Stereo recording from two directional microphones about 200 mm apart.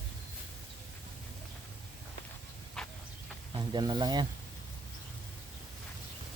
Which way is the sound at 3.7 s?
20° right (ahead or behind).